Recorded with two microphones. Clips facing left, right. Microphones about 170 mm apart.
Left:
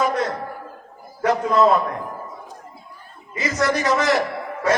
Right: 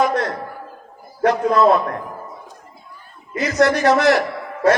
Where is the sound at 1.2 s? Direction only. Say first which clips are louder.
Right 2 dB; 65° right (ahead or behind).